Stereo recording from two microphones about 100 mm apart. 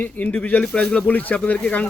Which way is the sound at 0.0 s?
15° left (ahead or behind).